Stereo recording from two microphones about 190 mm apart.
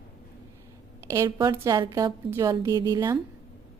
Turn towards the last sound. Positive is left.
turn(degrees=-20)  # may be behind; listen again after turning